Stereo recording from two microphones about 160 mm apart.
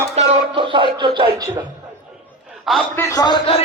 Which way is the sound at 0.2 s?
35° right (ahead or behind).